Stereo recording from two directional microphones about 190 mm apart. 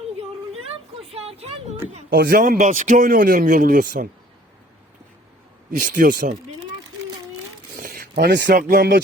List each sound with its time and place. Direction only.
1.0 s a sound: 30° right (ahead or behind)
2.0 s a man's voice: 50° right (ahead or behind)
5.7 s a man's voice: 45° right (ahead or behind)
7.8 s speech: 45° right (ahead or behind)